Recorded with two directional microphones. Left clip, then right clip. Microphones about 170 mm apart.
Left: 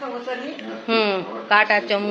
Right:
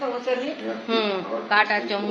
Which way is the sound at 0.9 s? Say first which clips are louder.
Left 4 dB; 35° left (ahead or behind).